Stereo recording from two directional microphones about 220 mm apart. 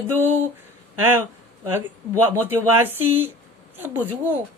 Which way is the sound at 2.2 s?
10° right (ahead or behind).